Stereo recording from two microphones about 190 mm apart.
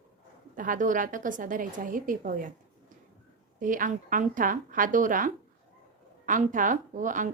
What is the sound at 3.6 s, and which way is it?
A woman's voice, 45° right (ahead or behind).